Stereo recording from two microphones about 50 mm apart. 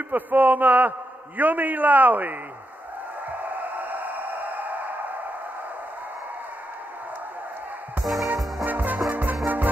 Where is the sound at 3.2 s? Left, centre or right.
Right.